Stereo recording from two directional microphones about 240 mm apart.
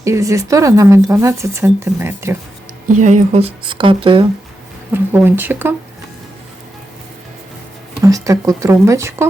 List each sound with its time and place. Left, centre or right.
0.0 s speech: centre
3.0 s speech: right
4.9 s speech: centre
8.0 s speech: centre